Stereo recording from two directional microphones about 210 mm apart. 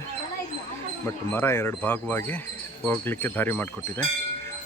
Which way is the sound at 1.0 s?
10° left (ahead or behind).